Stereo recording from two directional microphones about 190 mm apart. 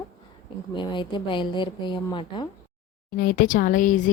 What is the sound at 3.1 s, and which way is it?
Speech, 50° left (ahead or behind).